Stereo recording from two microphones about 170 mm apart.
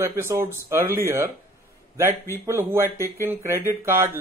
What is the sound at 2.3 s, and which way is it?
Speech, 15° right (ahead or behind).